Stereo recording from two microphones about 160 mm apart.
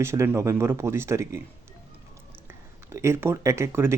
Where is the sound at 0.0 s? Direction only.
15° right (ahead or behind).